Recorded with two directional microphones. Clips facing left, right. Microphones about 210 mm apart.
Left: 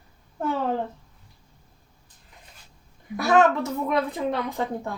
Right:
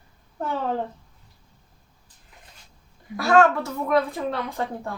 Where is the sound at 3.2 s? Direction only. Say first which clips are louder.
Right 1 dB; 20° left (ahead or behind).